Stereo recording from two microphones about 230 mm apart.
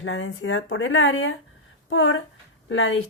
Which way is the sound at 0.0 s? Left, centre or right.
Left.